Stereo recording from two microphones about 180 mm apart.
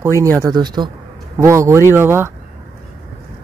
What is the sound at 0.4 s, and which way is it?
Speech, 20° right (ahead or behind).